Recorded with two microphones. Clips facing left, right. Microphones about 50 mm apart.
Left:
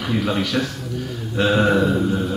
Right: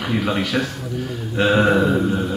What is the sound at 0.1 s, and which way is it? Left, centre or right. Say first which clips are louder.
A man's voice: even; centre.